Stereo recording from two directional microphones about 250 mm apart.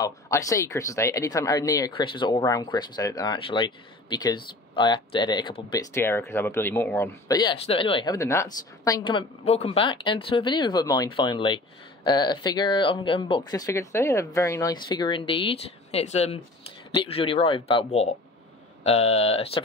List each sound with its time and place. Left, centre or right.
0.0 s speech: centre